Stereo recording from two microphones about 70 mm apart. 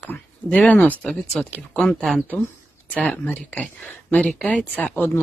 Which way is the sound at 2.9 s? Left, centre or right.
Left.